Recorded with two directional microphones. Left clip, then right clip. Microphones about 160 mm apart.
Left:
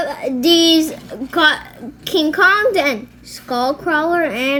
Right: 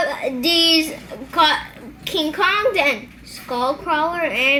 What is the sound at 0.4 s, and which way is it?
Child singing, 60° left (ahead or behind).